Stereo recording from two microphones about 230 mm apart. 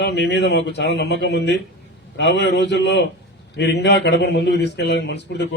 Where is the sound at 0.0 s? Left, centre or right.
Left.